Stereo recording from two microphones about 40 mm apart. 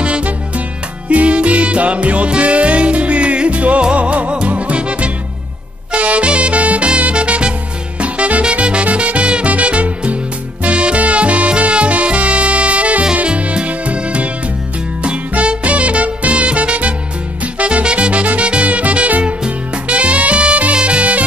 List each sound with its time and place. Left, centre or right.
0.0 s music: right
15.4 s music: right
19.2 s music: right